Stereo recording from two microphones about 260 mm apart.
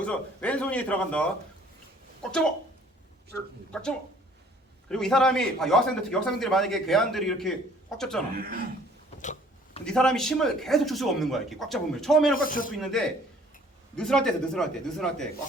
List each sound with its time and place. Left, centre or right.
0.0 s a man's voice: centre
3.7 s a man's voice: centre
8.4 s speech: right
9.2 s a sound: left
9.8 s a man's voice: centre
12.4 s speech: left
12.7 s a man's voice: centre